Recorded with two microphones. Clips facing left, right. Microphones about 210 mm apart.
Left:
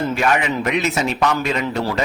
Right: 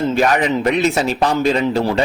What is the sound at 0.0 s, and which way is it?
Speech, 30° right (ahead or behind).